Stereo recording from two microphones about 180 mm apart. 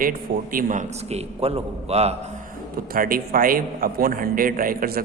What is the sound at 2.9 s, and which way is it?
A man's voice, 55° right (ahead or behind).